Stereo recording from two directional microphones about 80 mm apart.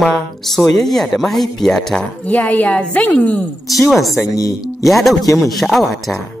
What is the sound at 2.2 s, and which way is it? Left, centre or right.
A woman's voice, left.